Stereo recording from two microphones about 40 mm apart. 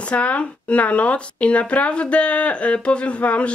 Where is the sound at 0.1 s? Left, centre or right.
Left.